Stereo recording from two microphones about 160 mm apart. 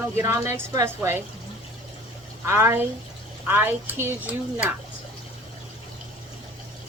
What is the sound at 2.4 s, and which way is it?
Speech, 15° right (ahead or behind).